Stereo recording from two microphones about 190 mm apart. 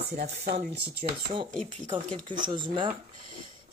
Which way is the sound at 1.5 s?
40° right (ahead or behind).